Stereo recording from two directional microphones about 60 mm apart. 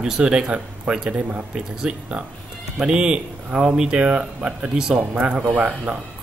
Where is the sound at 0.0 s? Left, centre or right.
Centre.